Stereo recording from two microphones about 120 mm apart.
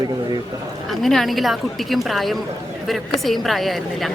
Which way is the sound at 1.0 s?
Centre (ahead or behind).